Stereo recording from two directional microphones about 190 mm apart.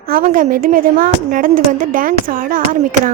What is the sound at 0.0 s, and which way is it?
A woman's voice, 50° right (ahead or behind).